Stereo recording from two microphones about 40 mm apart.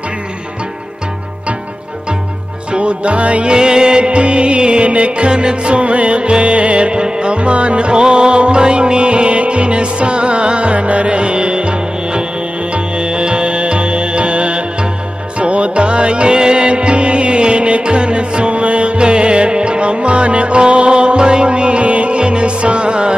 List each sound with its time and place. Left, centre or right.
2.7 s music: right
3.5 s music: right